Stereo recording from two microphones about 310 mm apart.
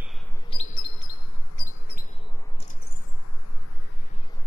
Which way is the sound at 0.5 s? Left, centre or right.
Left.